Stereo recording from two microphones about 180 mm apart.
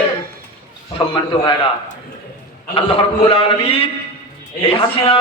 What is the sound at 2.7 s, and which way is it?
A man's voice, 30° left (ahead or behind).